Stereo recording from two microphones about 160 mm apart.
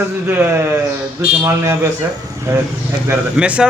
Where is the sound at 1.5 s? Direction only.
15° right (ahead or behind).